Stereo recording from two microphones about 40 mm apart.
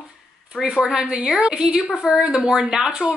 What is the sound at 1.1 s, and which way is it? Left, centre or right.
A woman's voice, right.